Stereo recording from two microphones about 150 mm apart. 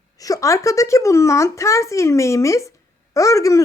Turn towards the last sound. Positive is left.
turn(degrees=20)  # may be behind; listen again after turning